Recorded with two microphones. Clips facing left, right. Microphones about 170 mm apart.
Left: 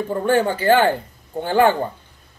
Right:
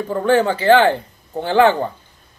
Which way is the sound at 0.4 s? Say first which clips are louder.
Right 2 dB; 10° left (ahead or behind).